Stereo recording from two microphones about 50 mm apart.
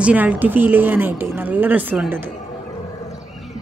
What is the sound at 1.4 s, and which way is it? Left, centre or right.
Speech, right.